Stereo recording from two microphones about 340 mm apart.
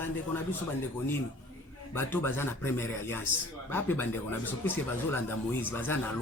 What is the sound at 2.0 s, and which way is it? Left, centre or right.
Speech, centre.